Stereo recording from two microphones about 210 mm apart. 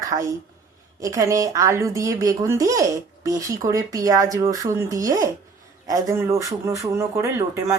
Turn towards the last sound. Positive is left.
turn(degrees=-15)  # may be behind; listen again after turning